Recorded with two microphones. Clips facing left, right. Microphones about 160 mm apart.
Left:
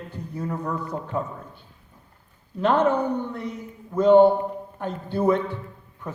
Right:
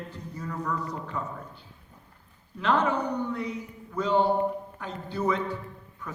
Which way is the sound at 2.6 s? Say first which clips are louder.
Left 5 dB; 45° left (ahead or behind).